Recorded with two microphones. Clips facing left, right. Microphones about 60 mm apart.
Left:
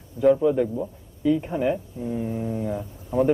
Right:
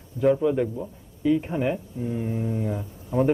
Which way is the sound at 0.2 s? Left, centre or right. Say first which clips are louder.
Left 2 dB; centre.